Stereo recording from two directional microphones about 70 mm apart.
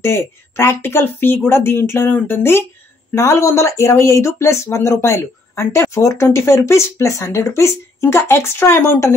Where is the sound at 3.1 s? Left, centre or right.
Left.